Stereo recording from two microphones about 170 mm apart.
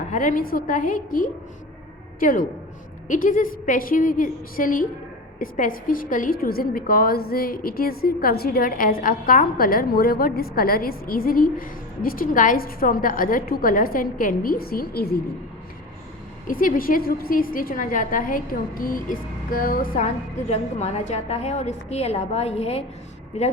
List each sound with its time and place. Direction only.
0.1 s a woman's voice: 50° left (ahead or behind)
16.5 s a woman's voice: 55° left (ahead or behind); by 22.8 s 35° left (ahead or behind)